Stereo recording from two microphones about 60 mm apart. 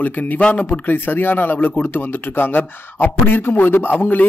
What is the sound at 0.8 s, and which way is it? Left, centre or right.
A man's voice, left.